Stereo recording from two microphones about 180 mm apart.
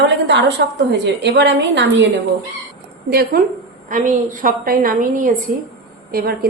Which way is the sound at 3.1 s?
60° right (ahead or behind).